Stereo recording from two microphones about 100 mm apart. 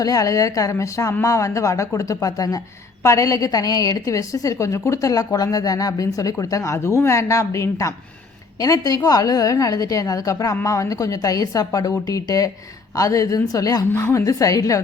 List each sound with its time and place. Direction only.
0.0 s a woman's voice: 35° left (ahead or behind)
13.9 s a woman's voice: 25° left (ahead or behind)